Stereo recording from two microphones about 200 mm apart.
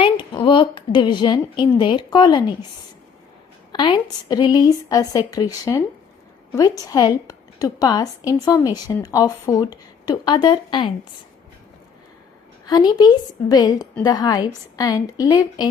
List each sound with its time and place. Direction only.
0.0 s speech: 25° left (ahead or behind)
3.7 s a woman's voice: 20° left (ahead or behind)
12.6 s speech: 20° left (ahead or behind)